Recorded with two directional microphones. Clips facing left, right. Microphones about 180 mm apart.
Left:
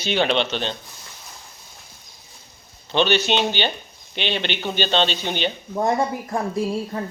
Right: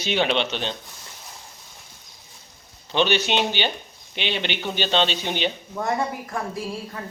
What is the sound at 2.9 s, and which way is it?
Speech, 10° right (ahead or behind).